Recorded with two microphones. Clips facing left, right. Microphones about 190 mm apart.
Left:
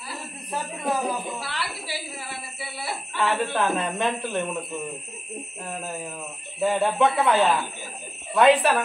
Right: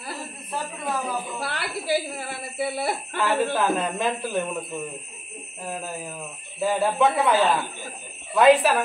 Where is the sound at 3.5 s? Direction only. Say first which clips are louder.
Right 1 dB; centre (ahead or behind).